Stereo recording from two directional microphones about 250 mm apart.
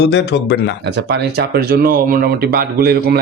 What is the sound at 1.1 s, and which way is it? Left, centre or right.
Speech, right.